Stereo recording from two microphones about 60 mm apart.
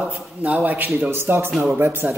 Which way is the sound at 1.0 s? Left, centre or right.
Right.